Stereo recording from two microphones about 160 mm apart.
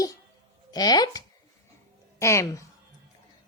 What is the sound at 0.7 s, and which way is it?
Speech, 25° left (ahead or behind).